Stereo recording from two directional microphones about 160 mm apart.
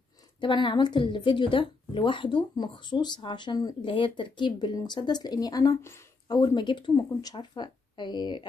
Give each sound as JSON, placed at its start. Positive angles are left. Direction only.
{"t": 0.4, "sound": "a woman's voice", "side_deg": 30}